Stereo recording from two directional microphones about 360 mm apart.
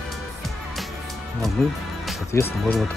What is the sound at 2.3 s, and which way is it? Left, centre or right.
Speech, centre.